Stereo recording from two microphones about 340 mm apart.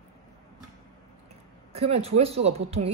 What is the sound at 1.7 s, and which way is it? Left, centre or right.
A woman's voice, centre.